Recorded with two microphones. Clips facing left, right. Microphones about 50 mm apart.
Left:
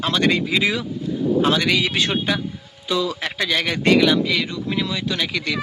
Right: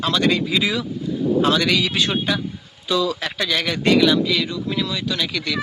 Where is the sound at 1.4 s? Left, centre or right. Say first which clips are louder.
Even; left.